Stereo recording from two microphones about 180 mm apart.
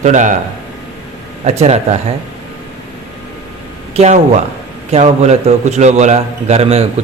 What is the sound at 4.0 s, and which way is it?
A man's voice, 40° right (ahead or behind).